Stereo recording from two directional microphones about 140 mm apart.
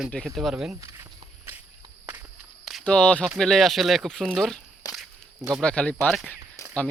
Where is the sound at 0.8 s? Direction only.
20° right (ahead or behind).